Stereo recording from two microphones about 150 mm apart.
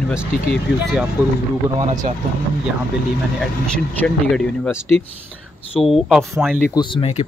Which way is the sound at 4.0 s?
5° left (ahead or behind).